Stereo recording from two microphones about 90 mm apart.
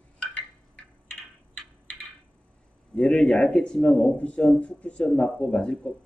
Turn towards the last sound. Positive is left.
turn(degrees=10)  # may be behind; listen again after turning